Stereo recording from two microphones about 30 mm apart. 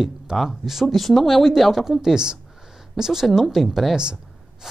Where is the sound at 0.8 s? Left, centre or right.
Centre.